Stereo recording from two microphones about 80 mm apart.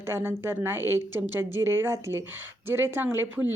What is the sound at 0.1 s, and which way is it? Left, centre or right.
A woman's voice, right.